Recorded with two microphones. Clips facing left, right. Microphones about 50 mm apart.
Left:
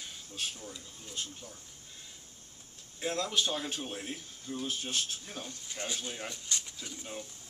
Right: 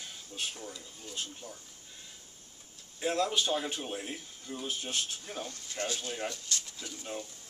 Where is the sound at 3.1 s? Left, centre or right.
Centre.